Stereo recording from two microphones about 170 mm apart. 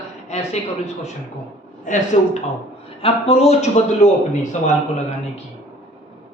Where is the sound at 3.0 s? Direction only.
35° left (ahead or behind).